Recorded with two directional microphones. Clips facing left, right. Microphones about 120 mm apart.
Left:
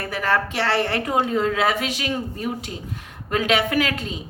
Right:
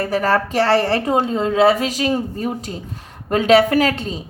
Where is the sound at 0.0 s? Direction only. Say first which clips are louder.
Right 5 dB; 40° right (ahead or behind).